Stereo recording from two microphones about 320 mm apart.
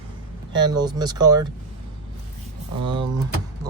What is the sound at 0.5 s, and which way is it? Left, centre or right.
Speech, centre.